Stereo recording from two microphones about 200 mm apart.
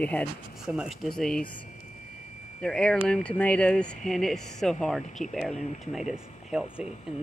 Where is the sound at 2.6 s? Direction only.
5° left (ahead or behind).